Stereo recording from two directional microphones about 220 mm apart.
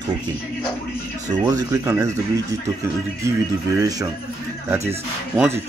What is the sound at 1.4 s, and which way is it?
Speech, 15° right (ahead or behind).